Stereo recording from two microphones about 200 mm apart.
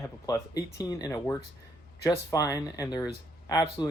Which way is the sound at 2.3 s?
15° left (ahead or behind).